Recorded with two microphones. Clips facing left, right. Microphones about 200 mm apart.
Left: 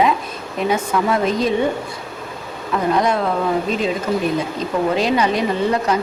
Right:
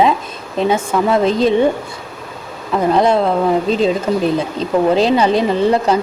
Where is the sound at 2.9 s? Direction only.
30° right (ahead or behind).